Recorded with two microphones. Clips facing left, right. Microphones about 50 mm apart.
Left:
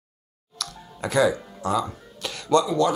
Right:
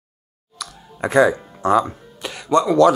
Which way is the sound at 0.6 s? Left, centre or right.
Centre.